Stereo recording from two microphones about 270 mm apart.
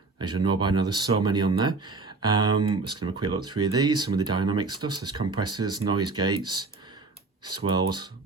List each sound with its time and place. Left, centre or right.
0.4 s speech: centre